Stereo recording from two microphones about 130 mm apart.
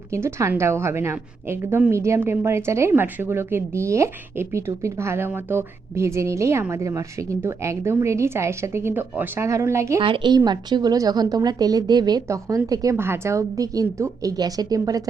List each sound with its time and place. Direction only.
0.1 s a woman's voice: 20° right (ahead or behind)
10.0 s a woman's voice: 40° right (ahead or behind)